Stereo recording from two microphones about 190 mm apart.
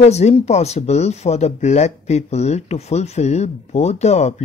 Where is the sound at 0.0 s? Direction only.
35° left (ahead or behind).